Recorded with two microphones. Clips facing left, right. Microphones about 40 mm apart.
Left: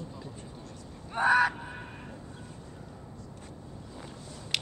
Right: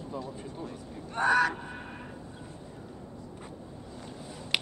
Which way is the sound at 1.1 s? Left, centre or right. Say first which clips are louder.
Left 1 dB; centre.